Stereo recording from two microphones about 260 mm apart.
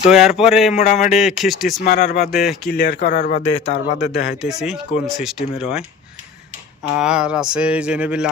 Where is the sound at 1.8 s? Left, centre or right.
Left.